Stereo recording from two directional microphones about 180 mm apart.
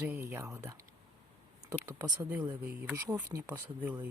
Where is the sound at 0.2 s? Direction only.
15° right (ahead or behind).